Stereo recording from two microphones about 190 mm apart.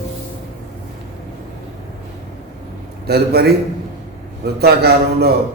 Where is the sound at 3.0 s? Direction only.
60° right (ahead or behind).